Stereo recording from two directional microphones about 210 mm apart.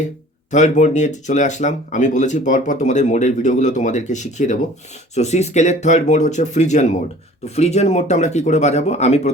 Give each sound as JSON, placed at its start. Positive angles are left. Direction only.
{"t": 0.5, "sound": "speech", "side_deg": 35}